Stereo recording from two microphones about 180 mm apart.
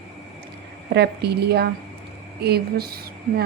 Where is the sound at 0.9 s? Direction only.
65° right (ahead or behind).